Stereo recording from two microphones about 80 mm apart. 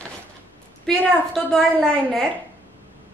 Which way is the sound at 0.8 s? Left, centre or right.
Centre.